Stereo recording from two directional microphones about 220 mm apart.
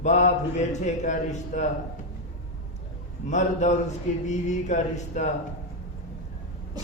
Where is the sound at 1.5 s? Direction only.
35° left (ahead or behind).